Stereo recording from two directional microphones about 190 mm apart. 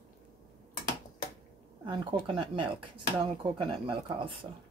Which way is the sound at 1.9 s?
25° right (ahead or behind).